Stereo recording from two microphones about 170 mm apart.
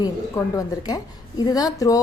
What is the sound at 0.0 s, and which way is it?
A woman's voice, 20° left (ahead or behind).